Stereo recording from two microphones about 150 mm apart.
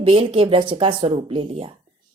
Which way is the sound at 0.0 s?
35° right (ahead or behind).